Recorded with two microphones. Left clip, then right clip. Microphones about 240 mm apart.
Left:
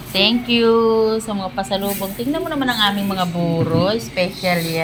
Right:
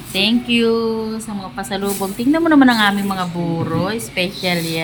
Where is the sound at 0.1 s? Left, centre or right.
Centre.